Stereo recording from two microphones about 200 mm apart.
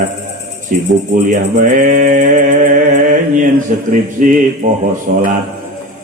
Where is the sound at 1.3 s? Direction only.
40° right (ahead or behind).